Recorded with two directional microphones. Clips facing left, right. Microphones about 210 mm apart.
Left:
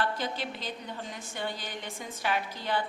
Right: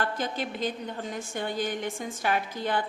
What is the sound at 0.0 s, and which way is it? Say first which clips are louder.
A woman's voice: right 2 dB; 50° right (ahead or behind).